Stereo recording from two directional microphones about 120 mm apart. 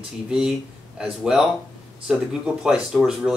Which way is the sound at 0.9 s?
5° right (ahead or behind).